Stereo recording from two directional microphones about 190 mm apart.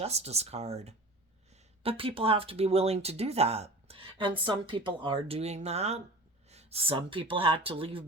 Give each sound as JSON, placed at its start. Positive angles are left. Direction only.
{"t": 0.0, "sound": "speech", "side_deg": -35}